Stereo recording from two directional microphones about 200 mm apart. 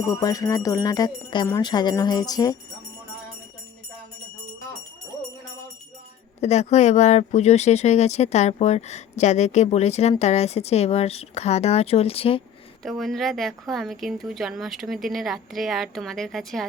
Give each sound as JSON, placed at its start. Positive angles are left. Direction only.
{"t": 0.1, "sound": "music", "side_deg": 20}
{"t": 1.5, "sound": "jingle bell", "side_deg": 15}
{"t": 6.4, "sound": "speech", "side_deg": 35}
{"t": 12.8, "sound": "a woman's voice", "side_deg": 0}